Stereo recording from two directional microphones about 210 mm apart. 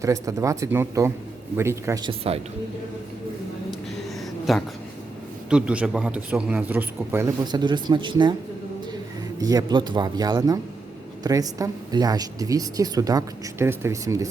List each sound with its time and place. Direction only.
0.0 s a woman's voice: 15° right (ahead or behind)
4.5 s a woman's voice: centre (ahead or behind); by 8.4 s 20° right (ahead or behind)
9.4 s a man's voice: 15° right (ahead or behind)